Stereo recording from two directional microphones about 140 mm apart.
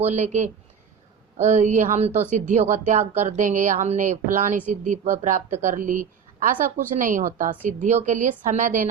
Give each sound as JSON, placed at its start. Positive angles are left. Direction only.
{"t": 0.0, "sound": "a woman's voice", "side_deg": -55}